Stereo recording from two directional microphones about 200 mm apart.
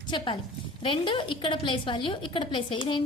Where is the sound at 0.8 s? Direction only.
25° left (ahead or behind).